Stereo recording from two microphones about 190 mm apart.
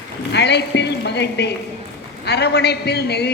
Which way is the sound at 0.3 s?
65° left (ahead or behind).